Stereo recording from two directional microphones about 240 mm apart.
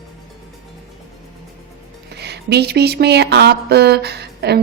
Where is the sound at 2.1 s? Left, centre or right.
Right.